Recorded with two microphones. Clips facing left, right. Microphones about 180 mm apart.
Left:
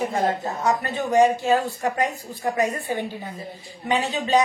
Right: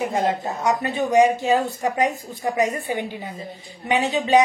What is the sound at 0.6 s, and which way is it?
A woman's voice, 15° right (ahead or behind).